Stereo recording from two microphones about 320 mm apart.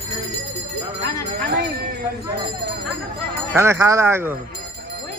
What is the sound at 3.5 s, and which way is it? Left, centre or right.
Speech, centre.